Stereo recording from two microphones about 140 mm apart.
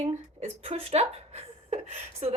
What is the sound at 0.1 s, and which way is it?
Speech, 50° right (ahead or behind).